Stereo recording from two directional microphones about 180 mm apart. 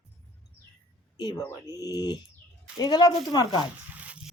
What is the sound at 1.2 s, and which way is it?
A woman's voice, 25° left (ahead or behind).